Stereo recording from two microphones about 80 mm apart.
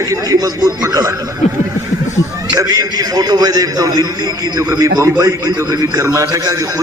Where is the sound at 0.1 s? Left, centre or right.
Right.